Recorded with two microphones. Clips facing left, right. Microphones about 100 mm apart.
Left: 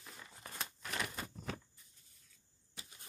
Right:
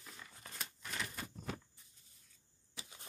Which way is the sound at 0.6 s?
70° left (ahead or behind).